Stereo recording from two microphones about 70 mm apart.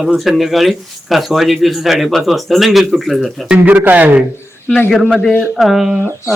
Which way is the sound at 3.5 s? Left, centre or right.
Right.